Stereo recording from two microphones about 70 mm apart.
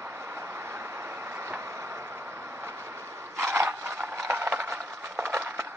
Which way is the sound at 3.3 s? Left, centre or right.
Right.